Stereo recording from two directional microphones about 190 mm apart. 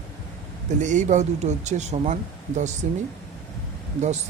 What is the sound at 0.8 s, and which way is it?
Speech, 40° right (ahead or behind).